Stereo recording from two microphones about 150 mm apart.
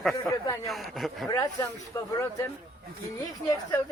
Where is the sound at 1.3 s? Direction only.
25° left (ahead or behind).